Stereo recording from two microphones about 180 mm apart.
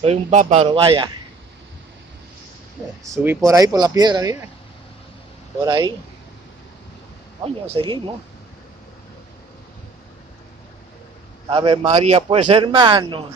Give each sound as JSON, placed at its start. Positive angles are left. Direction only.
{"t": 0.0, "sound": "speech", "side_deg": -40}
{"t": 0.7, "sound": "a man's voice", "side_deg": -30}
{"t": 3.0, "sound": "a man's voice", "side_deg": -15}
{"t": 5.6, "sound": "a man's voice", "side_deg": -25}
{"t": 7.4, "sound": "speech", "side_deg": -30}
{"t": 11.5, "sound": "a man's voice", "side_deg": -30}